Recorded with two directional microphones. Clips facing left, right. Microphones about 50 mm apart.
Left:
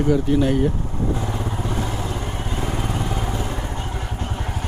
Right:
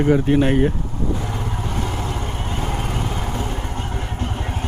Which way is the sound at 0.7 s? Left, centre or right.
Left.